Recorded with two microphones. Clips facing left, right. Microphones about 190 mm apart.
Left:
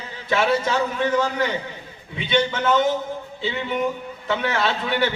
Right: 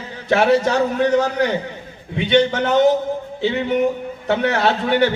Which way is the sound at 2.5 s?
40° right (ahead or behind).